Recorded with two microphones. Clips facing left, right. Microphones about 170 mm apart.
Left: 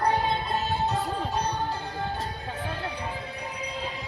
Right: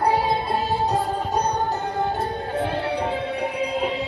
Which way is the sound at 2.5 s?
75° right (ahead or behind).